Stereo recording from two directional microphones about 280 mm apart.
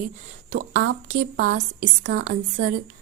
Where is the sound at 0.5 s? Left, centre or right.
Right.